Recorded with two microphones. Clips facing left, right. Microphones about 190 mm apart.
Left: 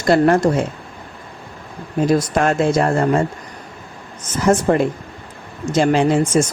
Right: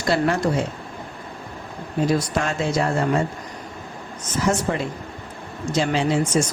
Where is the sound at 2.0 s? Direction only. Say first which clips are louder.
Left 7 dB; 50° left (ahead or behind).